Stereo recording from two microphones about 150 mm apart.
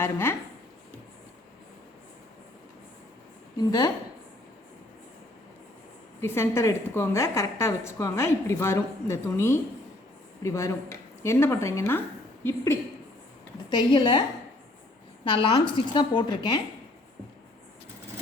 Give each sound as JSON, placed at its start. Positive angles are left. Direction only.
{"t": 0.0, "sound": "a woman's voice", "side_deg": 15}
{"t": 3.6, "sound": "a woman's voice", "side_deg": 25}
{"t": 6.1, "sound": "a woman's voice", "side_deg": 15}
{"t": 13.7, "sound": "a woman's voice", "side_deg": 30}
{"t": 15.2, "sound": "a woman's voice", "side_deg": 35}